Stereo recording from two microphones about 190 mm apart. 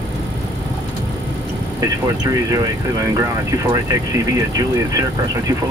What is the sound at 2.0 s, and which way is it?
Speech, 20° right (ahead or behind).